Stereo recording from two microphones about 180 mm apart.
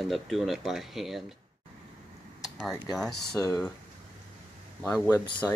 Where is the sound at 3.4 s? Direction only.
15° left (ahead or behind).